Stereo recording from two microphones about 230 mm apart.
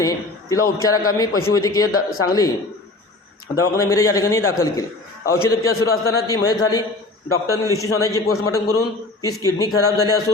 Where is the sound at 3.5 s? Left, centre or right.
Centre.